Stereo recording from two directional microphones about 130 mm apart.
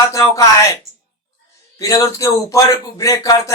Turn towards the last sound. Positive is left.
turn(degrees=25)  # may be behind; listen again after turning